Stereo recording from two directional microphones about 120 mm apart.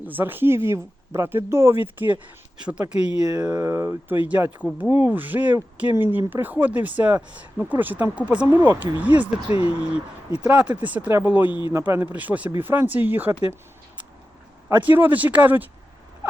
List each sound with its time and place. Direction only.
0.0 s speech: 15° right (ahead or behind)
3.2 s speech: 30° right (ahead or behind); by 9.3 s 15° right (ahead or behind)
9.5 s speech: 50° left (ahead or behind)
10.4 s speech: 10° right (ahead or behind)
14.8 s speech: 15° right (ahead or behind)